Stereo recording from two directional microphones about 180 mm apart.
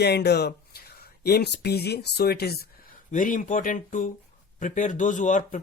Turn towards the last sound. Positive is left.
turn(degrees=45)  # may be behind; listen again after turning